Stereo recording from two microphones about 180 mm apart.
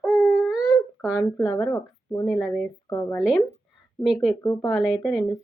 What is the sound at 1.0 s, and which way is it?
Speech, 10° left (ahead or behind).